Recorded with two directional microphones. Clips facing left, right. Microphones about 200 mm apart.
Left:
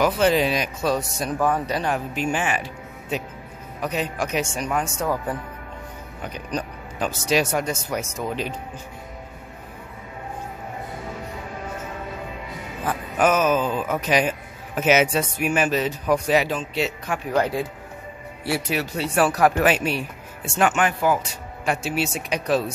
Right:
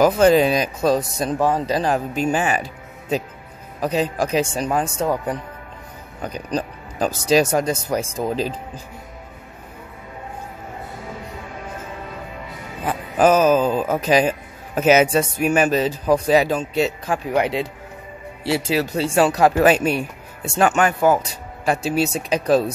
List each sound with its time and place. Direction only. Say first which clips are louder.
0.0 s speech: right 5 dB; 45° right (ahead or behind)
1.4 s speech: right 3 dB; 30° right (ahead or behind)
3.8 s speech: right 5 dB; 35° right (ahead or behind)
5.1 s speech: right 3 dB; 20° right (ahead or behind)
6.2 s speech: right 4 dB; 40° right (ahead or behind)
13.2 s speech: right 5 dB; 35° right (ahead or behind)
17.3 s speech: right 1 dB; 20° right (ahead or behind)
18.5 s speech: right 5 dB; 30° right (ahead or behind)
19.6 s speech: right 5 dB; 40° right (ahead or behind)